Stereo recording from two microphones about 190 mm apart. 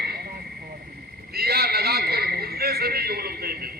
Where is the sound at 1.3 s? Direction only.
55° right (ahead or behind).